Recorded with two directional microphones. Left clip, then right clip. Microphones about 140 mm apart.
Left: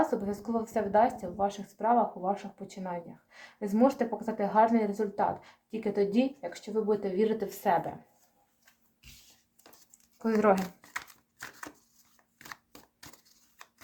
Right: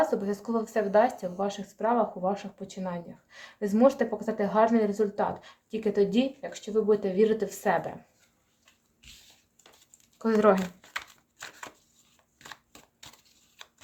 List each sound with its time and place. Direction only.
0.0 s speech: 25° right (ahead or behind)
10.2 s speech: 25° right (ahead or behind)